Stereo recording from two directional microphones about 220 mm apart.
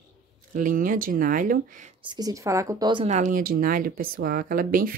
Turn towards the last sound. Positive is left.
turn(degrees=-40)  # may be behind; listen again after turning